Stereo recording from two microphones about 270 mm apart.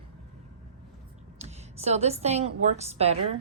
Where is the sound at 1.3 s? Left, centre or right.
Right.